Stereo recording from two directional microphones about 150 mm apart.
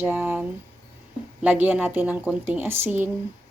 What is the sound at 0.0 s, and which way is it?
Speech, 10° right (ahead or behind).